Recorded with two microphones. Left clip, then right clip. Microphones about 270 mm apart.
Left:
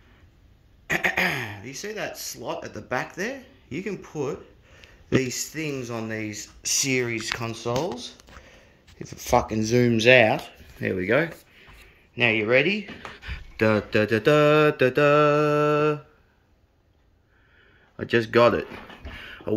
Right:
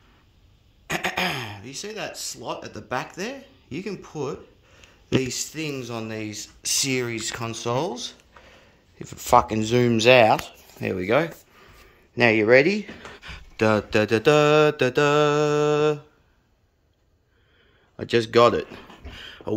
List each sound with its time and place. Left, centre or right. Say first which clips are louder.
0.8 s speech: left 2 dB; centre
7.6 s speech: right 4 dB; centre
8.4 s a sound: even; centre
9.5 s speech: right 1 dB; centre
12.2 s speech: right 4 dB; right
13.1 s mantra: left 1 dB; centre
17.9 s mantra: right 1 dB; centre
19.1 s a sound: even; centre